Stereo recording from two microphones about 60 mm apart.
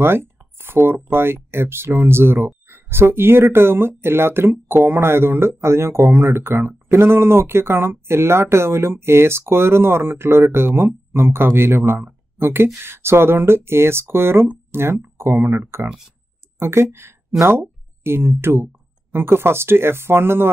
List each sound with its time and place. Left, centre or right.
0.0 s speech: right